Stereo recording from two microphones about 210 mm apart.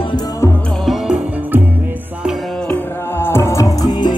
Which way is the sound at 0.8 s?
5° right (ahead or behind).